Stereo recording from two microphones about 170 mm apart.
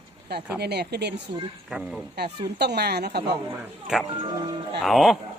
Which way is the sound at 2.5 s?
75° right (ahead or behind).